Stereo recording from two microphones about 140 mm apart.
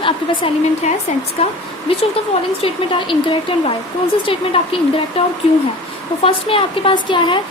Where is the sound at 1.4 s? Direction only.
45° left (ahead or behind).